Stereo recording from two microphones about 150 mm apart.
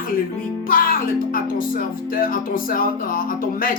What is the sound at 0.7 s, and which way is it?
Speech, 70° left (ahead or behind).